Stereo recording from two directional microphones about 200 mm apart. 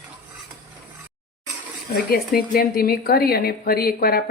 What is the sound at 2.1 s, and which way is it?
Speech, 45° left (ahead or behind).